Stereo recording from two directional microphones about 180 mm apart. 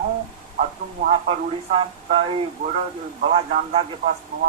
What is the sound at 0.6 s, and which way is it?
Speech, 35° right (ahead or behind).